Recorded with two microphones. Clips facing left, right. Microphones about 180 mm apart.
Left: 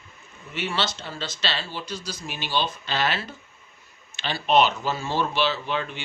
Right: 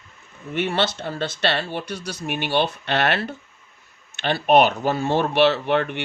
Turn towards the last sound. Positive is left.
turn(degrees=-65)  # may be behind; listen again after turning